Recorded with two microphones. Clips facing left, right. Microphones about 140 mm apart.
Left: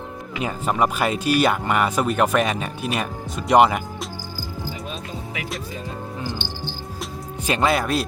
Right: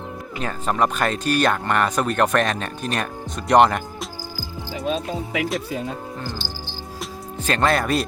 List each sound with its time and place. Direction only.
0.4 s speech: 10° left (ahead or behind)
6.4 s music: 35° right (ahead or behind)
7.4 s speech: 10° left (ahead or behind)